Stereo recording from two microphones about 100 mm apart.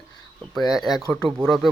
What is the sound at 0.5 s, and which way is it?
Speech, centre (ahead or behind).